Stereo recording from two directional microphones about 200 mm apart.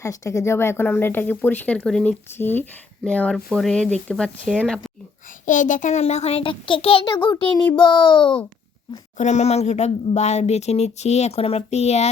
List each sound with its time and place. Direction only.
0.0 s speech: 15° left (ahead or behind)
5.5 s a child's voice: 40° left (ahead or behind)
9.1 s speech: 35° left (ahead or behind)